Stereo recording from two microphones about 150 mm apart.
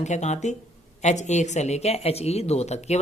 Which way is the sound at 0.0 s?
50° left (ahead or behind).